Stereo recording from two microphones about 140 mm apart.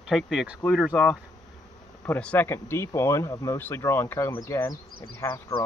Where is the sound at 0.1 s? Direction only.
5° right (ahead or behind).